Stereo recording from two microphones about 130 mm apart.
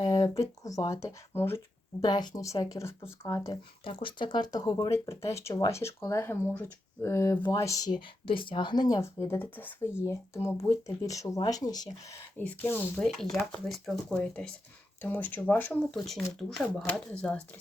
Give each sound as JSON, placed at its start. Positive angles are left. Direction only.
{"t": 0.0, "sound": "speech", "side_deg": 30}
{"t": 2.0, "sound": "speech", "side_deg": 35}
{"t": 3.5, "sound": "speech", "side_deg": 40}
{"t": 8.3, "sound": "speech", "side_deg": 40}
{"t": 9.2, "sound": "speech", "side_deg": 15}
{"t": 12.4, "sound": "speech", "side_deg": 15}
{"t": 13.4, "sound": "speech", "side_deg": 0}
{"t": 16.0, "sound": "speech", "side_deg": 0}